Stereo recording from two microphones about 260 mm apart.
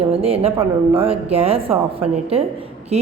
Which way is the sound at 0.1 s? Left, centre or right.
Right.